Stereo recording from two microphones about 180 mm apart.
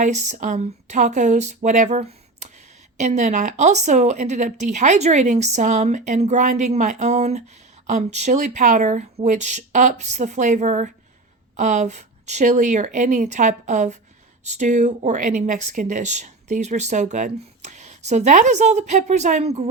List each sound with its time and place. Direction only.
0.0 s speech: 40° right (ahead or behind)